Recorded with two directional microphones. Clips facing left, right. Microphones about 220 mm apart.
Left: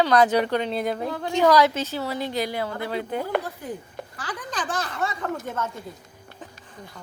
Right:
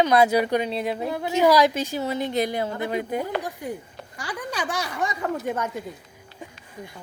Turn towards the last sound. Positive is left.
turn(degrees=-15)  # may be behind; listen again after turning